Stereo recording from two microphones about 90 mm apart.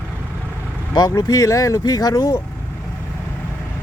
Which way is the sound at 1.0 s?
45° left (ahead or behind).